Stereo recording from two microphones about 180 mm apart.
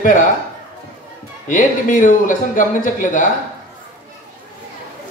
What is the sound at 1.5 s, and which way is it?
Speech, 50° left (ahead or behind).